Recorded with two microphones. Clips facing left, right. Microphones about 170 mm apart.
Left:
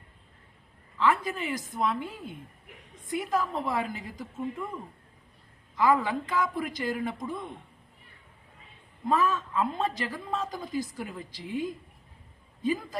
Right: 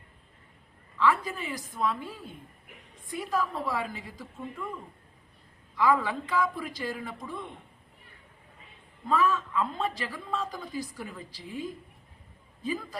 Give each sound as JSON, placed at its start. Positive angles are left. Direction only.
{"t": 0.9, "sound": "speech", "side_deg": 20}
{"t": 5.7, "sound": "speech", "side_deg": 20}
{"t": 9.0, "sound": "speech", "side_deg": 20}